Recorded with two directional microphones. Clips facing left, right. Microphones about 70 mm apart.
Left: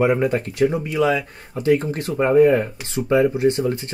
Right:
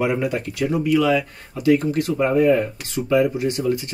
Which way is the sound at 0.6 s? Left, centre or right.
Left.